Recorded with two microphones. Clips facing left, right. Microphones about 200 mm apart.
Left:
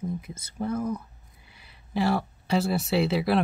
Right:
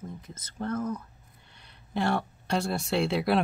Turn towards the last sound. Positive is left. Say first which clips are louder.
# left 2 dB
turn(degrees=0)  # may be behind; listen again after turning